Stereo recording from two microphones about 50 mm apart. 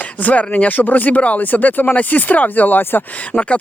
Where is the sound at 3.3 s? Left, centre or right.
Left.